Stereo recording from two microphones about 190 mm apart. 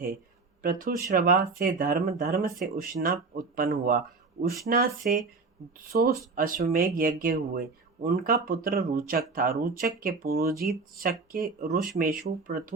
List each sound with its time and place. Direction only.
0.6 s speech: 50° right (ahead or behind)